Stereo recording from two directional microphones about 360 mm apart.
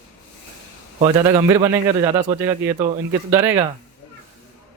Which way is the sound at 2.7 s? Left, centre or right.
Centre.